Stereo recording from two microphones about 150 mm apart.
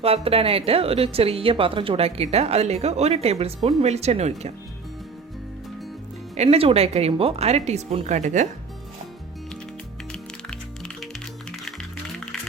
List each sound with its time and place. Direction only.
0.0 s a woman's voice: 40° right (ahead or behind)
6.3 s a woman's voice: 45° right (ahead or behind)
10.1 s music: 5° left (ahead or behind)